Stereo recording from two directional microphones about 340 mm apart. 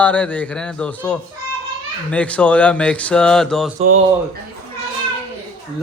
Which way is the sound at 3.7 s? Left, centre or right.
Right.